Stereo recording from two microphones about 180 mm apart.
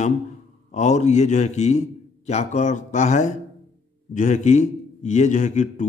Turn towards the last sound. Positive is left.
turn(degrees=45)  # may be behind; listen again after turning